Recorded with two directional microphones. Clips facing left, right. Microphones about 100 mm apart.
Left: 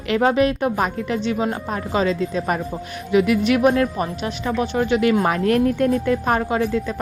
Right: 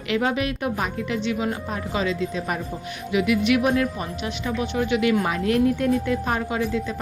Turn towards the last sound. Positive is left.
turn(degrees=50)  # may be behind; listen again after turning